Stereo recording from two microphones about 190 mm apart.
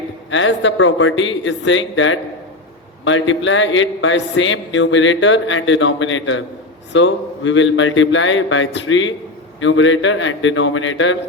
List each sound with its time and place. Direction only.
0.3 s speech: 85° left